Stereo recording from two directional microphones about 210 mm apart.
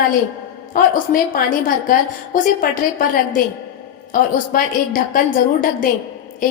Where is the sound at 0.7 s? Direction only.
40° left (ahead or behind).